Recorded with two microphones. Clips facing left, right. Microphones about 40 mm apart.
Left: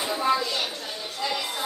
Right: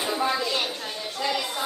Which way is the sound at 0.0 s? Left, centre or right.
Centre.